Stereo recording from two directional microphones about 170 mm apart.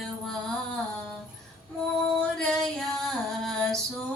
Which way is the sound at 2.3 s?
Centre (ahead or behind).